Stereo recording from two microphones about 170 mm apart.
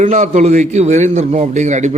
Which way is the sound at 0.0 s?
45° right (ahead or behind).